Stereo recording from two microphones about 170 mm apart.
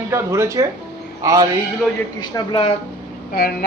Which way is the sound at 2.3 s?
30° left (ahead or behind).